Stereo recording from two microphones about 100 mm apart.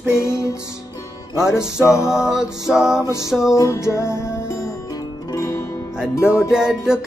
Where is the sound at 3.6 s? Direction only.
30° left (ahead or behind).